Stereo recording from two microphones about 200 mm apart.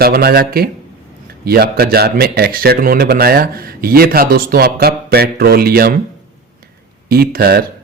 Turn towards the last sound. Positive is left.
turn(degrees=-50)  # may be behind; listen again after turning